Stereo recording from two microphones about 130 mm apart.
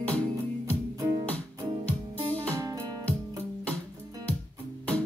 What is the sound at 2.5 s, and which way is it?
Music, 30° right (ahead or behind).